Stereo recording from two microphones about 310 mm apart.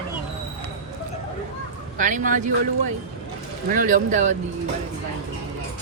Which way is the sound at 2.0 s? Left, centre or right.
Right.